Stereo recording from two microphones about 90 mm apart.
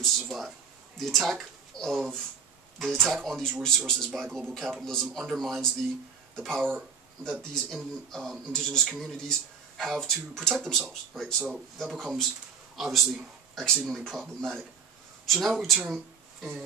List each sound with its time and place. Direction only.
0.0 s speech: centre (ahead or behind)